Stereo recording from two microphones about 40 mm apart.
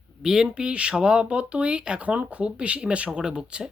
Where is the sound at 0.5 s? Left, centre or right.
Right.